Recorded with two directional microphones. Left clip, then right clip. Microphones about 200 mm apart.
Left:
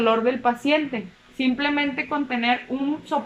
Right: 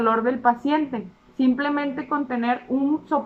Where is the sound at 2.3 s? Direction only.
5° right (ahead or behind).